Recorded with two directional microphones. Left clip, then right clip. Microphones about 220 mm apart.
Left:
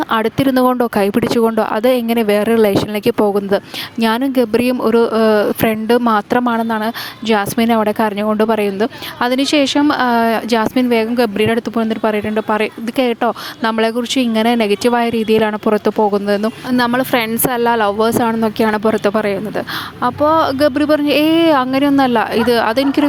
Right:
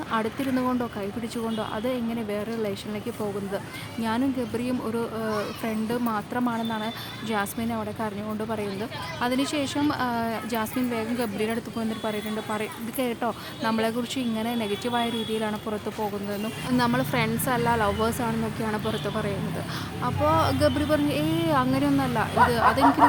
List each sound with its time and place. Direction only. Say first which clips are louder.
0.1 s speech: left 11 dB; 45° left (ahead or behind)
4.0 s speech: left 13 dB; 45° left (ahead or behind)